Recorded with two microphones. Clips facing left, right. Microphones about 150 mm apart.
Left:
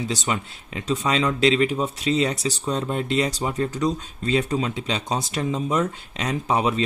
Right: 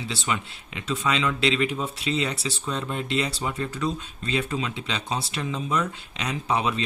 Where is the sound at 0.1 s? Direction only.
40° left (ahead or behind).